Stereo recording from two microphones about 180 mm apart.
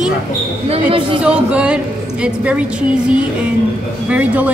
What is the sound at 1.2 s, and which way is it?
Speech, 5° right (ahead or behind).